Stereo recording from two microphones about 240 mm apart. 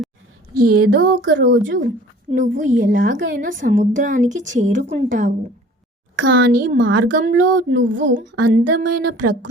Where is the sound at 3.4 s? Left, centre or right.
Right.